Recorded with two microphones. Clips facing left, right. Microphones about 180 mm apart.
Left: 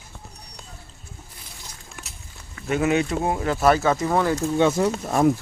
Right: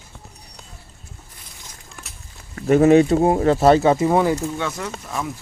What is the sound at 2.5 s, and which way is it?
Speech, 40° right (ahead or behind).